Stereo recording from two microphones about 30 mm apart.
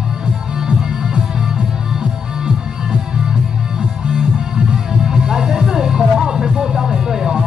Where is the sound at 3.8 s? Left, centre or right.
Right.